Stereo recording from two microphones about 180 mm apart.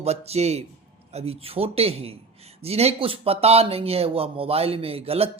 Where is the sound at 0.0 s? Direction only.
35° right (ahead or behind).